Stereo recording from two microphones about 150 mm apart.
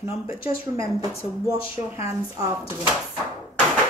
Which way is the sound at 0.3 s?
20° right (ahead or behind).